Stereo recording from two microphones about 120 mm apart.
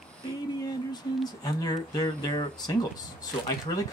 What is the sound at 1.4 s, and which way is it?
Speech, 35° left (ahead or behind).